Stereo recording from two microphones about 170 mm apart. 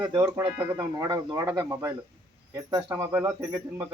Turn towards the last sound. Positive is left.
turn(degrees=-20)  # may be behind; listen again after turning